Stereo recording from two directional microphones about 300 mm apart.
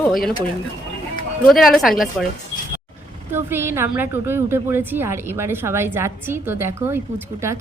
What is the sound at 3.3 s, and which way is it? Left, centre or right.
A woman's voice, centre.